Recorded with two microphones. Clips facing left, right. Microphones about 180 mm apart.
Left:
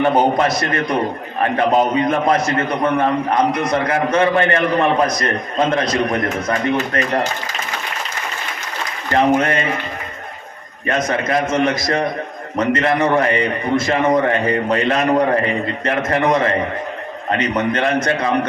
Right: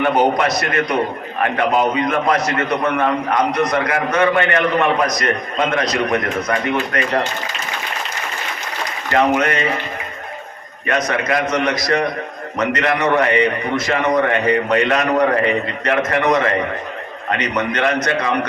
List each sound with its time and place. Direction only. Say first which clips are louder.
0.0 s a man's voice: left 1 dB; 30° left (ahead or behind)
9.1 s a man's voice: left 1 dB; 30° left (ahead or behind)
10.8 s a man's voice: even; 30° left (ahead or behind)